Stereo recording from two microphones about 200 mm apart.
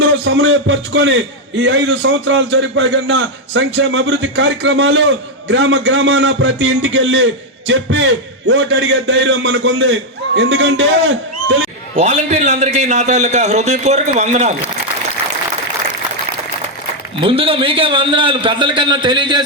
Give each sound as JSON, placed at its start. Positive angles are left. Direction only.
{"t": 0.3, "sound": "a man's voice", "side_deg": -70}
{"t": 11.9, "sound": "a man's voice", "side_deg": -35}
{"t": 17.2, "sound": "a man's voice", "side_deg": -25}